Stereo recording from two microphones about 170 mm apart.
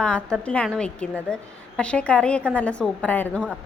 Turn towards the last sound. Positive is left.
turn(degrees=10)  # may be behind; listen again after turning